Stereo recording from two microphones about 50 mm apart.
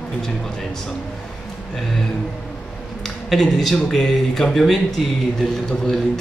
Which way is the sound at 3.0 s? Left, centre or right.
Centre.